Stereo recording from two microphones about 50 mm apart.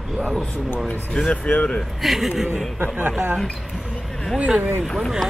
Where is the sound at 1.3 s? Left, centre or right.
Centre.